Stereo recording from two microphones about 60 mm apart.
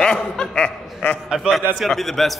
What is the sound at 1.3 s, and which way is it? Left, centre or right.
Speech, centre.